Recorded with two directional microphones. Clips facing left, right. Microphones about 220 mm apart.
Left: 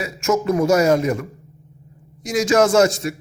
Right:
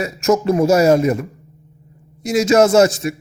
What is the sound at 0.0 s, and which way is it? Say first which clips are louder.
Speech: right 4 dB; 35° right (ahead or behind).